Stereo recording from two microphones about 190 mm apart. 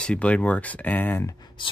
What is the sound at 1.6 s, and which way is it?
Speech, 25° left (ahead or behind).